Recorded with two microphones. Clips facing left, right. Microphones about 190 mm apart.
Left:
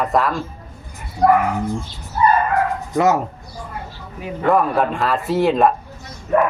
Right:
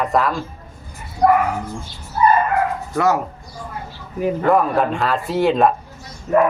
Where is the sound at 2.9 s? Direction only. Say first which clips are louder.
Left 2 dB; 20° left (ahead or behind).